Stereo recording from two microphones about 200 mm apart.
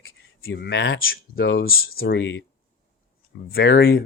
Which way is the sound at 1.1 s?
50° left (ahead or behind).